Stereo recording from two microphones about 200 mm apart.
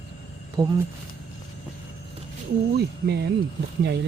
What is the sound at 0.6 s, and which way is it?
Speech, 20° right (ahead or behind).